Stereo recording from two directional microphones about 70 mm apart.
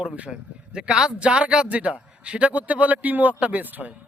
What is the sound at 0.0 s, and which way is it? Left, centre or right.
Speech, centre.